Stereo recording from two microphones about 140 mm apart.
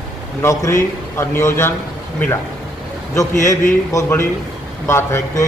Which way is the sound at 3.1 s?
20° left (ahead or behind).